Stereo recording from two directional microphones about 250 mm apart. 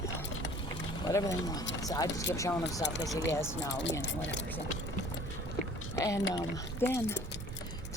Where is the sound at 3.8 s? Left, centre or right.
Left.